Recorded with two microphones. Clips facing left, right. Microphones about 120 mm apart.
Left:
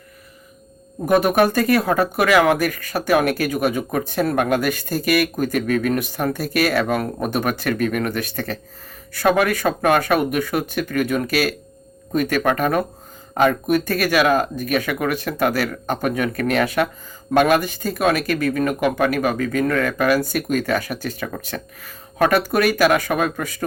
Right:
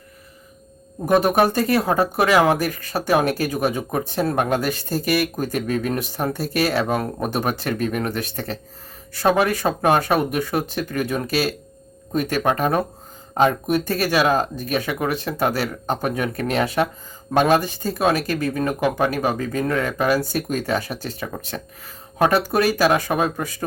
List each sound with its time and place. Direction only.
1.0 s speech: 25° right (ahead or behind)